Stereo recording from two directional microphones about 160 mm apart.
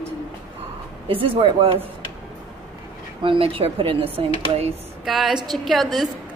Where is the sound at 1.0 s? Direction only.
35° right (ahead or behind).